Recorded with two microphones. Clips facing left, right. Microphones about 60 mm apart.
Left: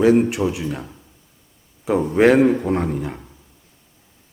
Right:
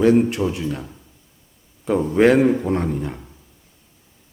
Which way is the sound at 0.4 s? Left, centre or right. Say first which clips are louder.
Left 1 dB; centre.